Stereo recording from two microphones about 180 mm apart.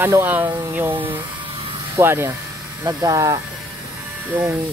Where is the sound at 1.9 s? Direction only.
15° right (ahead or behind).